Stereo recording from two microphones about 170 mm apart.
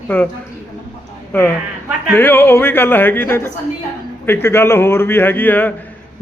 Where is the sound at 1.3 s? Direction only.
10° left (ahead or behind).